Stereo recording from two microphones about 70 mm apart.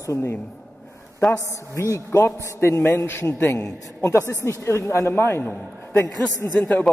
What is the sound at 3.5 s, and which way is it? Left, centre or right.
A man's voice, left.